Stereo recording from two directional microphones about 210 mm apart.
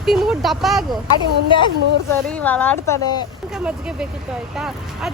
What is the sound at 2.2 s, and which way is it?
Speech, 5° left (ahead or behind).